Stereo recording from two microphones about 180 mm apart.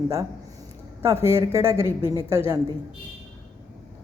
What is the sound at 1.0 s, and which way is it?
Speech, 15° right (ahead or behind).